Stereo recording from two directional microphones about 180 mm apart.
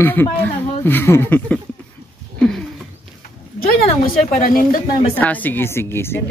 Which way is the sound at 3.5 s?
55° left (ahead or behind).